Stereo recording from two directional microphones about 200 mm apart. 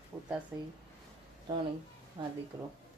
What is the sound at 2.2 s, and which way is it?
Speech, 25° right (ahead or behind).